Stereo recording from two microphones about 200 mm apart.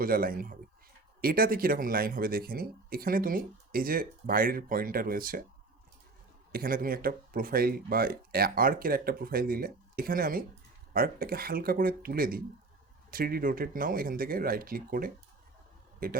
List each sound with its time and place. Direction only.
0.0 s speech: 45° right (ahead or behind)
6.5 s speech: 45° right (ahead or behind)